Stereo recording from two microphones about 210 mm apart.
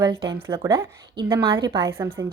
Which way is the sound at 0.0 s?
15° right (ahead or behind).